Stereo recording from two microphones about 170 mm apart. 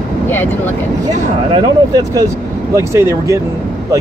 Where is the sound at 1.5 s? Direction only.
25° right (ahead or behind).